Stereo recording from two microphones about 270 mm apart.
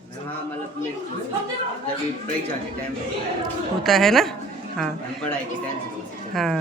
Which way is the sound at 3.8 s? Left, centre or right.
Centre.